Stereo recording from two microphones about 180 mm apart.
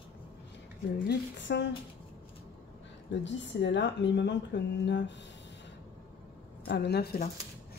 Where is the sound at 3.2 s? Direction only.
85° left.